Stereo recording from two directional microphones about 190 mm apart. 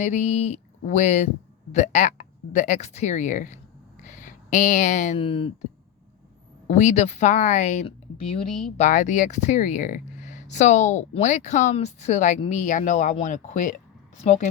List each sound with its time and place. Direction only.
0.0 s speech: 40° left (ahead or behind)
4.0 s a sound: 40° left (ahead or behind)
5.2 s speech: 30° left (ahead or behind)
6.7 s speech: 40° left (ahead or behind)